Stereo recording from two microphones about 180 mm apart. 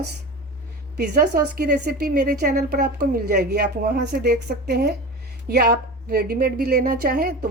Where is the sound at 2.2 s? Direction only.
45° right (ahead or behind).